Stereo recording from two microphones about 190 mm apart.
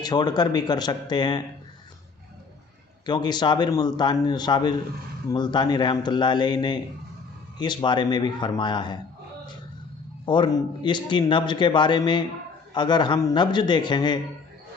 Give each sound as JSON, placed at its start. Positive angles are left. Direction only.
{"t": 0.0, "sound": "speech", "side_deg": 20}
{"t": 3.1, "sound": "speech", "side_deg": 20}
{"t": 10.2, "sound": "speech", "side_deg": 25}